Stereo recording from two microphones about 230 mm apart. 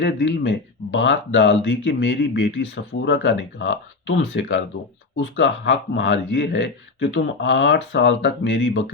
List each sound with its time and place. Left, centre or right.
0.0 s speech: left